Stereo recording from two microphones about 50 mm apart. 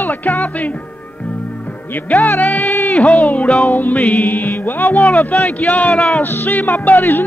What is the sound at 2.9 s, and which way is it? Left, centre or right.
Speech, left.